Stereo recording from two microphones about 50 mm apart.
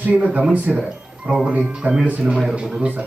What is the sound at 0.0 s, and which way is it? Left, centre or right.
Speech, right.